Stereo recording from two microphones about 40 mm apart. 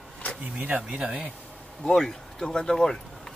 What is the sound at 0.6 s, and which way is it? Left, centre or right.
Speech, right.